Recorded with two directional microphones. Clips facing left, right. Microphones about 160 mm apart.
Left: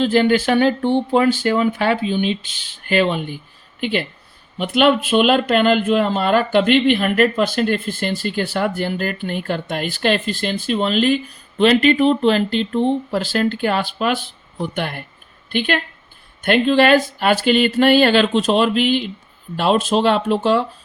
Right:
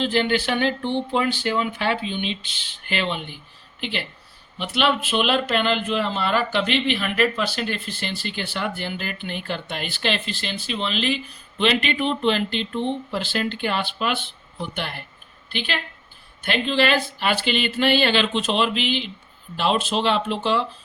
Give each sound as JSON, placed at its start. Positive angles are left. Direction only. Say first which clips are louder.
{"t": 0.0, "sound": "speech", "louder": "left 6 dB", "side_deg": 45}